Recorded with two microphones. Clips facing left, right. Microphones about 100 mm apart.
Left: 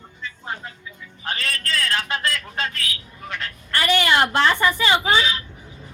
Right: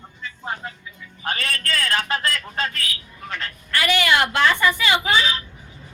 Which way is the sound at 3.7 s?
35° left (ahead or behind).